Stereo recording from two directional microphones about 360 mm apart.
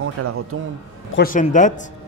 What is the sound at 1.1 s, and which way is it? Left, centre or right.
Speech, left.